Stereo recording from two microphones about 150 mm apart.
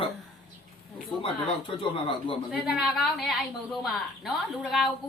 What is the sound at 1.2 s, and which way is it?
Speech, 35° left (ahead or behind).